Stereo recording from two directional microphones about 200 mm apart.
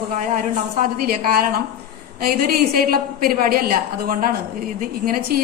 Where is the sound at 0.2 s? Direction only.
40° right (ahead or behind).